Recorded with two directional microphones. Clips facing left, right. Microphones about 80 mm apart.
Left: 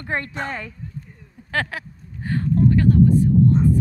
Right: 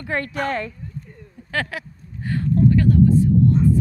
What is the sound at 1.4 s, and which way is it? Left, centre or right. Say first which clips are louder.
Vehicle: left 1 dB; left.